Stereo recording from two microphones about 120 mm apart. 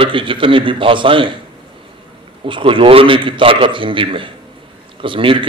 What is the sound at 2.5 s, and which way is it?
A man's voice, 45° right (ahead or behind).